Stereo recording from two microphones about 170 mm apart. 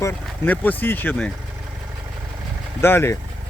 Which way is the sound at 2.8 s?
15° left (ahead or behind).